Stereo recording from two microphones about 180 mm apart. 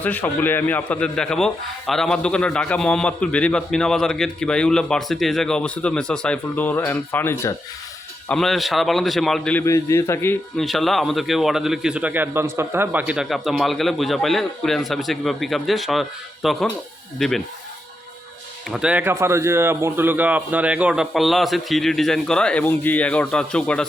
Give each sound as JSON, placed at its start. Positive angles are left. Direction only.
{"t": 0.0, "sound": "a man's voice", "side_deg": 10}
{"t": 8.3, "sound": "a man's voice", "side_deg": 0}
{"t": 10.6, "sound": "a man's voice", "side_deg": 0}
{"t": 18.7, "sound": "a man's voice", "side_deg": -5}